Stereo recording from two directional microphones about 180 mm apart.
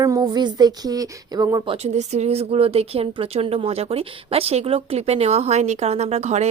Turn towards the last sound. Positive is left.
turn(degrees=-40)  # may be behind; listen again after turning